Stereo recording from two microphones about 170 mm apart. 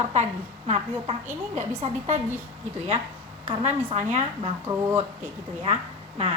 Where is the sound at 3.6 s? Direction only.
40° right (ahead or behind).